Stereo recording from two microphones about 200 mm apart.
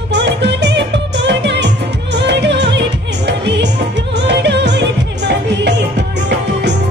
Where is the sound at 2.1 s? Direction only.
60° right (ahead or behind).